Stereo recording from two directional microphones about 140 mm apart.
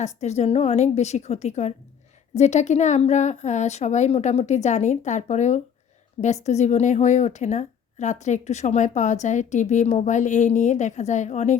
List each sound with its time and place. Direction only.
0.0 s a woman's voice: 55° left (ahead or behind)